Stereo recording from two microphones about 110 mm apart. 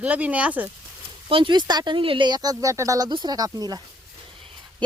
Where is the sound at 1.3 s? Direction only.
50° right (ahead or behind).